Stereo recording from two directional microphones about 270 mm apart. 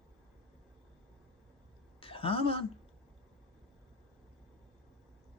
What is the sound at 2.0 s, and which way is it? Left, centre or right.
Speech, centre.